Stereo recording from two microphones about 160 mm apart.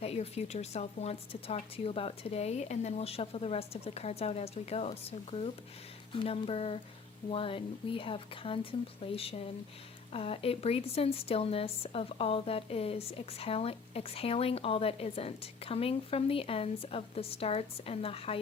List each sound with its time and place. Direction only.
0.0 s a woman's voice: 40° left (ahead or behind)